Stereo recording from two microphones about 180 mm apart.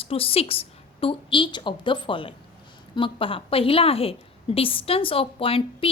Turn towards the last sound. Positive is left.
turn(degrees=30)  # may be behind; listen again after turning